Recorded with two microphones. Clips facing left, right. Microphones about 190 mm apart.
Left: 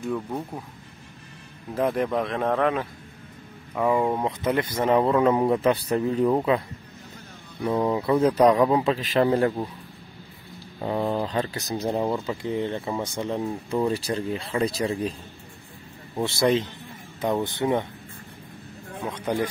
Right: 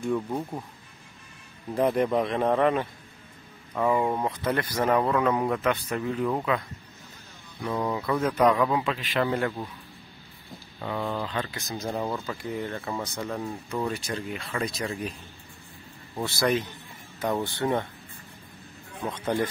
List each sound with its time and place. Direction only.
0.0 s speech: centre (ahead or behind)
1.8 s speech: centre (ahead or behind)
3.7 s speech: 10° left (ahead or behind); by 6.6 s 30° left (ahead or behind)
7.6 s a man's voice: 25° left (ahead or behind)
10.8 s a man's voice: 35° left (ahead or behind)
11.7 s speech: 25° left (ahead or behind)
16.2 s speech: 25° left (ahead or behind)
19.0 s speech: 15° left (ahead or behind)